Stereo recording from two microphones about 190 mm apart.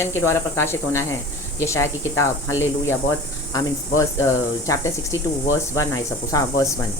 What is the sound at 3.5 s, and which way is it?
Speech, 15° left (ahead or behind).